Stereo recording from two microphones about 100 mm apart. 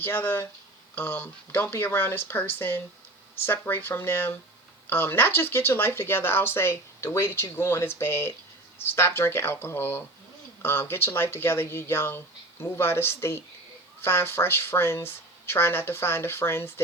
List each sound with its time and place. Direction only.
0.0 s speech: 20° left (ahead or behind)